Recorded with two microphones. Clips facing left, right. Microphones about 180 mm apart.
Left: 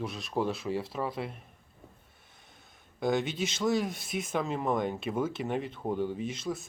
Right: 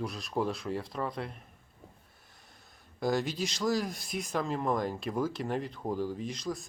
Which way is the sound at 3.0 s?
Centre (ahead or behind).